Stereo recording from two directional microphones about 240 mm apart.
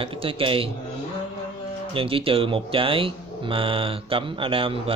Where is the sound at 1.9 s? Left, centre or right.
Right.